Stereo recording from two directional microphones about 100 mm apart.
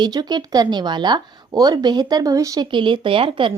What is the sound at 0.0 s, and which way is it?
A woman's voice, 45° right (ahead or behind).